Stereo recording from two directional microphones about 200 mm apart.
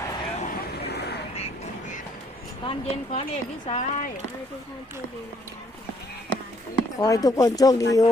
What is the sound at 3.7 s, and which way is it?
Speech, 35° left (ahead or behind).